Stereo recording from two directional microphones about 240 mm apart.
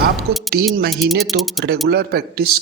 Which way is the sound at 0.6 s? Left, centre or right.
Right.